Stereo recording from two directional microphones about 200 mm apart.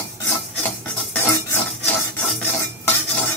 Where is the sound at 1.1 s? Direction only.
10° left (ahead or behind).